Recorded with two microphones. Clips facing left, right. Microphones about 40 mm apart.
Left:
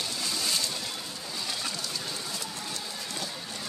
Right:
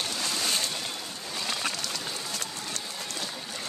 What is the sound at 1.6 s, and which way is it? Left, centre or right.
Horse, right.